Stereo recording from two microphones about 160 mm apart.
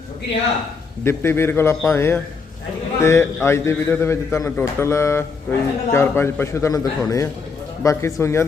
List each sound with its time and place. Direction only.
1.0 s a man's voice: 15° left (ahead or behind)